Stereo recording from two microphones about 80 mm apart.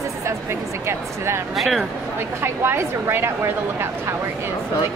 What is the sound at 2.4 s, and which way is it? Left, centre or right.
A woman's voice, right.